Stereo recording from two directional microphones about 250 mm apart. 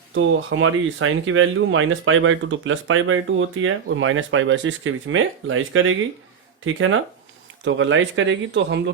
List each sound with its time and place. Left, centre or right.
0.1 s speech: right